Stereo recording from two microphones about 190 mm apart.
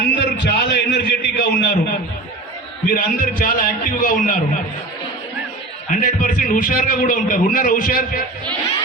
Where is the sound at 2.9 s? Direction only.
50° left (ahead or behind).